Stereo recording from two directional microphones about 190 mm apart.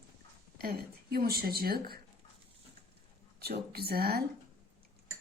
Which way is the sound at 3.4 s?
55° right (ahead or behind).